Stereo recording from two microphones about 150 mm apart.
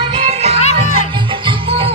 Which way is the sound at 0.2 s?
45° right (ahead or behind).